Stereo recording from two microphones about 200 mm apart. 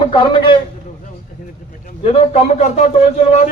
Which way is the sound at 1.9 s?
30° left (ahead or behind).